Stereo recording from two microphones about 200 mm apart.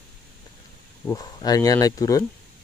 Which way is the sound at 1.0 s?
20° left (ahead or behind).